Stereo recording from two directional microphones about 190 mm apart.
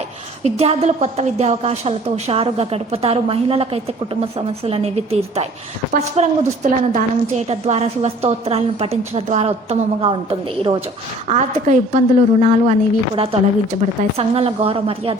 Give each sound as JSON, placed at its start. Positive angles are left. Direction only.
{"t": 0.4, "sound": "a woman's voice", "side_deg": -35}